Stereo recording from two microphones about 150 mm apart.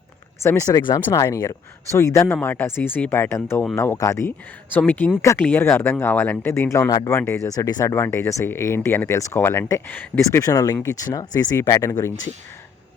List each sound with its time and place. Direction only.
0.4 s speech: 20° left (ahead or behind)